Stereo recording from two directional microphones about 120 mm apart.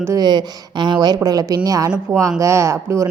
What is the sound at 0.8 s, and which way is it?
A woman's voice, 35° right (ahead or behind).